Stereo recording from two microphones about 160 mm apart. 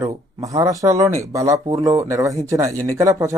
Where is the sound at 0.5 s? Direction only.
20° right (ahead or behind).